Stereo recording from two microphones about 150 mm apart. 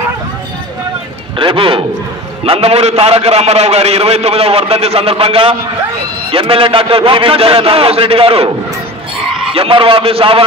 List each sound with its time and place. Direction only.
1.4 s a man's voice: 35° right (ahead or behind)
9.5 s a man's voice: 35° right (ahead or behind)